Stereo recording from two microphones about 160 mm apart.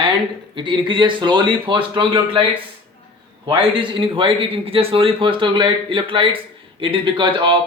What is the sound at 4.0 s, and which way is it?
Speech, 35° right (ahead or behind).